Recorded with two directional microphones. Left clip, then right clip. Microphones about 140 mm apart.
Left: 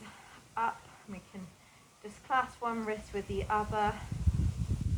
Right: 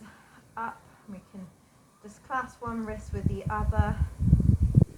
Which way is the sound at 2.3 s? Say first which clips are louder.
Left 1 dB; 15° right (ahead or behind).